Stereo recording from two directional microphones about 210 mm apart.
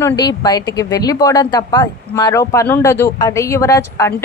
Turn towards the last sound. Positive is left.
turn(degrees=15)  # may be behind; listen again after turning